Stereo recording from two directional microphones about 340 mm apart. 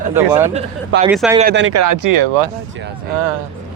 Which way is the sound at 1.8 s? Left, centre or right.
Right.